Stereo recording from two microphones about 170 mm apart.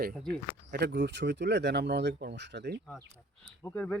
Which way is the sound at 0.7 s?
80° right.